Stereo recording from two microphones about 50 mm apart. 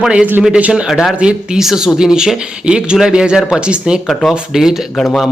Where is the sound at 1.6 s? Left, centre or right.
Centre.